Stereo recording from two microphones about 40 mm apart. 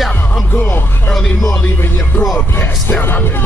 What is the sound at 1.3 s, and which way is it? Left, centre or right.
Speech, centre.